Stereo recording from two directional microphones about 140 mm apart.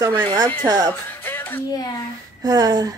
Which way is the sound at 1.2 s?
15° left (ahead or behind).